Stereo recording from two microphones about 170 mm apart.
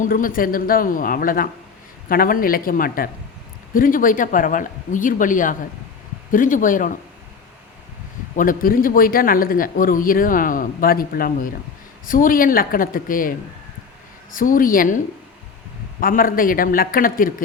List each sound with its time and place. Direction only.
0.0 s a man's voice: 55° left (ahead or behind)
8.4 s a man's voice: 55° left (ahead or behind)
14.3 s a man's voice: 55° left (ahead or behind)
16.0 s a man's voice: 55° left (ahead or behind)